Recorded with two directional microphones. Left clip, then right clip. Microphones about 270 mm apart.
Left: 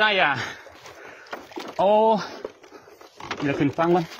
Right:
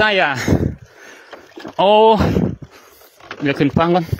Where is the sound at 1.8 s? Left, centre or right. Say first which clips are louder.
Right 7 dB; right.